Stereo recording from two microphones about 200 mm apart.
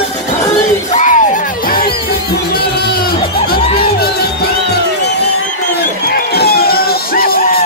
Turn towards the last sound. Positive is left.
turn(degrees=50)  # may be behind; listen again after turning